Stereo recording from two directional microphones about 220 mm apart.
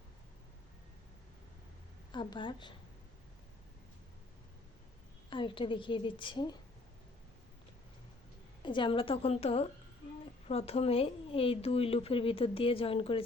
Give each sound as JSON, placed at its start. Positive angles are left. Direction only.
{"t": 2.1, "sound": "a woman's voice", "side_deg": 20}
{"t": 5.3, "sound": "a woman's voice", "side_deg": 25}
{"t": 8.6, "sound": "a woman's voice", "side_deg": 20}